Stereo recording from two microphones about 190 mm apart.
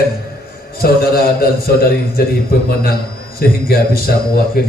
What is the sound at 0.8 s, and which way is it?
A man's voice, 55° left (ahead or behind).